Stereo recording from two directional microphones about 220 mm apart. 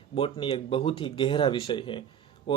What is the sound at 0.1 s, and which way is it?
Speech, 25° left (ahead or behind).